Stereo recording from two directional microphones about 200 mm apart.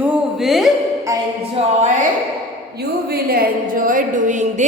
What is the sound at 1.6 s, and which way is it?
Speech, 35° right (ahead or behind).